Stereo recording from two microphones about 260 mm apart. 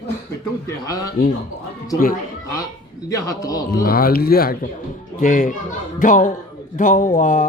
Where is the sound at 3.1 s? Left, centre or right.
Centre.